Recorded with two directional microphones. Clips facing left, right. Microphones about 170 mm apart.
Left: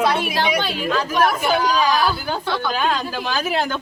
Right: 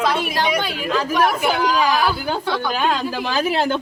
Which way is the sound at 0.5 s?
10° right (ahead or behind).